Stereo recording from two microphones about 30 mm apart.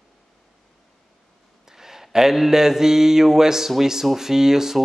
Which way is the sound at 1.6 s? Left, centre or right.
Centre.